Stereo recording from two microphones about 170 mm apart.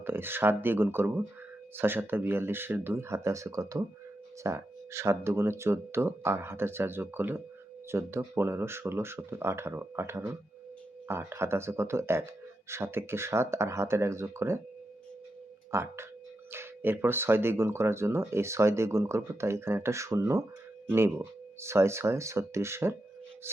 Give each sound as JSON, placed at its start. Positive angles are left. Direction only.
{"t": 0.0, "sound": "speech", "side_deg": -15}
{"t": 15.7, "sound": "speech", "side_deg": -15}